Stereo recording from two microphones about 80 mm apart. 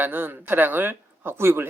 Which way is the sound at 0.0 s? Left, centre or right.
Right.